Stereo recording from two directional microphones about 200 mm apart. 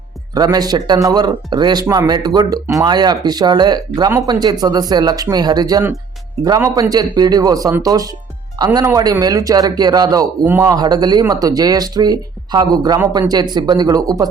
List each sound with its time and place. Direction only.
0.3 s a man's voice: 20° right (ahead or behind)